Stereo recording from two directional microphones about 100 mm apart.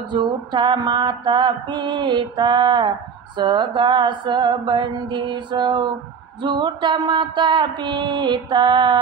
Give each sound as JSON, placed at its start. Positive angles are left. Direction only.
{"t": 0.1, "sound": "music", "side_deg": -50}